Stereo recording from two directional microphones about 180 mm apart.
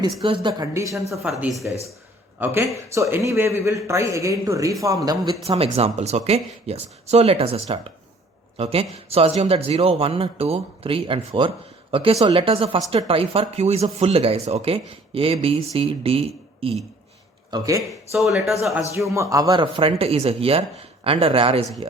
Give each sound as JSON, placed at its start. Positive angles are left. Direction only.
{"t": 0.2, "sound": "speech", "side_deg": -30}
{"t": 0.6, "sound": "speech", "side_deg": -15}
{"t": 1.3, "sound": "speech", "side_deg": 0}
{"t": 2.4, "sound": "speech", "side_deg": -10}
{"t": 5.4, "sound": "speech", "side_deg": -35}
{"t": 17.5, "sound": "speech", "side_deg": -15}
{"t": 18.1, "sound": "speech", "side_deg": 0}
{"t": 18.9, "sound": "speech", "side_deg": -15}